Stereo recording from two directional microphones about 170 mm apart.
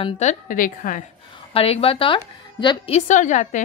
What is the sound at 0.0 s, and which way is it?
A woman's voice, 45° left (ahead or behind).